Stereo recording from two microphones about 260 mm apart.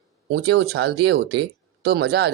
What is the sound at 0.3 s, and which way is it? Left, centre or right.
Speech, right.